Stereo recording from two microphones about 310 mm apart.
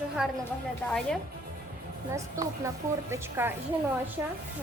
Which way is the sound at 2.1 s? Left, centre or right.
Centre.